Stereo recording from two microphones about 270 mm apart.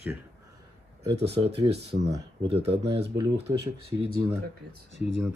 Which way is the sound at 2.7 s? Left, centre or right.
Right.